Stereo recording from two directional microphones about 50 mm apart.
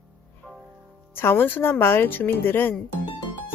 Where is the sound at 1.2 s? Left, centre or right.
Left.